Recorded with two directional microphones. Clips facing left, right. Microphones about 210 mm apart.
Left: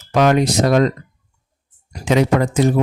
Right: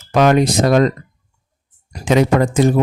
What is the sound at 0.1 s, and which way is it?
Speech, 50° right (ahead or behind).